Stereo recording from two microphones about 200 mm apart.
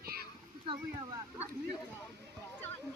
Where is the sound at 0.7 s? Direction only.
25° right (ahead or behind).